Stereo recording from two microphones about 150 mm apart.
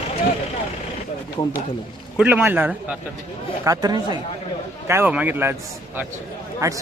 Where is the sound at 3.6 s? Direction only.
25° right (ahead or behind).